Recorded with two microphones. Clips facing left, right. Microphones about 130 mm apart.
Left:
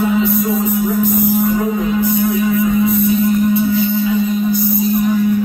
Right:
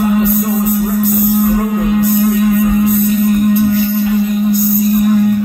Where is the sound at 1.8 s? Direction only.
65° right (ahead or behind).